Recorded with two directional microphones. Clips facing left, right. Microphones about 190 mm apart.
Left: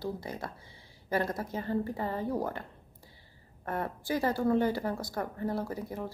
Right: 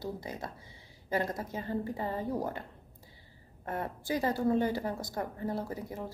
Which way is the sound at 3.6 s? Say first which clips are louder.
Left 2 dB; 20° right (ahead or behind).